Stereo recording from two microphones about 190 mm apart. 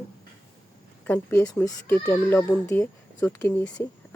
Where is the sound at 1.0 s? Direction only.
10° left (ahead or behind).